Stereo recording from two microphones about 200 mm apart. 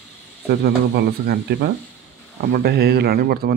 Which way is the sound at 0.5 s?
55° right (ahead or behind).